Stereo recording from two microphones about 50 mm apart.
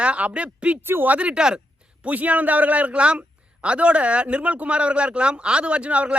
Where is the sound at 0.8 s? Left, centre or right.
Right.